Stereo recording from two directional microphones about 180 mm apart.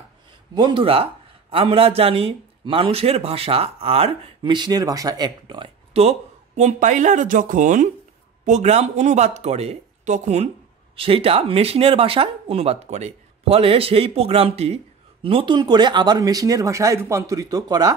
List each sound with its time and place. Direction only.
0.6 s a man's voice: 30° right (ahead or behind)